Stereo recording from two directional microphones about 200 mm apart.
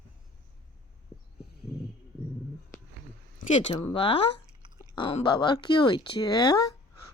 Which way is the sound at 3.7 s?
20° left (ahead or behind).